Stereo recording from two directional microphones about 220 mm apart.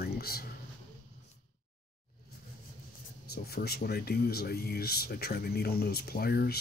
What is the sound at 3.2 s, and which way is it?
Speech, 45° left (ahead or behind).